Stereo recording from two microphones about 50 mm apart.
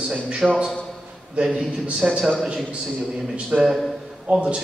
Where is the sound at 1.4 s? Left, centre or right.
Right.